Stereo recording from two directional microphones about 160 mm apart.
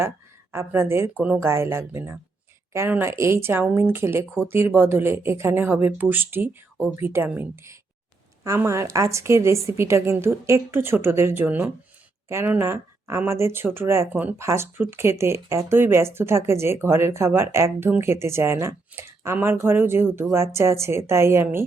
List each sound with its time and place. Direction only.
0.5 s speech: 15° right (ahead or behind)